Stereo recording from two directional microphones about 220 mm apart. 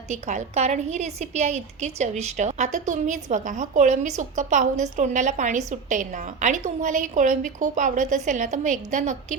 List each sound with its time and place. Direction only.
0.1 s a woman's voice: 30° right (ahead or behind)